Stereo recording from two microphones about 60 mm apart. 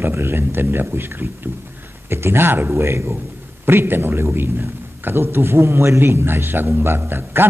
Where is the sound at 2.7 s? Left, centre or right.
Right.